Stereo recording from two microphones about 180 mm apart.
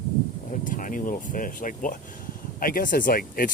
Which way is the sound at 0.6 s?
45° left (ahead or behind).